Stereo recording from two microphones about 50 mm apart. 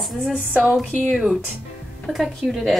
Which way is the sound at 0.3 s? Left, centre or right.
Right.